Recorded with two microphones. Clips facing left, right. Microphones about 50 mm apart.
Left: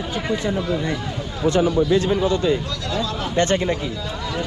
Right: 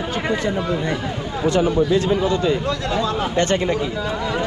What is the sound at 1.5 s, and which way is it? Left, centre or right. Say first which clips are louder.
Speech: even; right.